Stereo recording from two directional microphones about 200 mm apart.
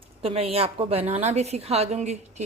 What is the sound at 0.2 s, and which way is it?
A woman's voice, 30° right (ahead or behind).